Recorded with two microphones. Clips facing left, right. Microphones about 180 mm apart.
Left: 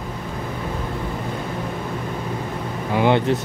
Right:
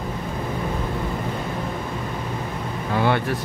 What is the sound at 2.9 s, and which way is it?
Speech, 20° left (ahead or behind).